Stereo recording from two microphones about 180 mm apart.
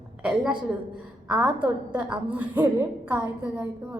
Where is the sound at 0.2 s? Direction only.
5° right (ahead or behind).